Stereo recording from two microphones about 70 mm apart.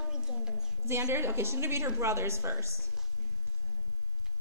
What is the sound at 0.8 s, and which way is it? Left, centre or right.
A woman's voice, right.